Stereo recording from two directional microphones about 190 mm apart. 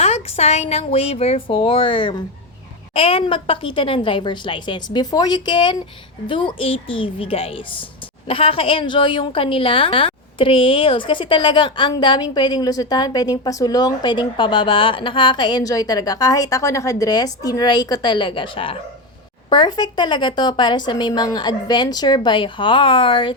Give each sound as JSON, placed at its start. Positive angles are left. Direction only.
{"t": 0.0, "sound": "a woman's voice", "side_deg": 35}